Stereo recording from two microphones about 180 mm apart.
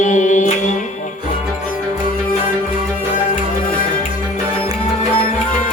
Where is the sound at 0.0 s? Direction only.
45° left (ahead or behind).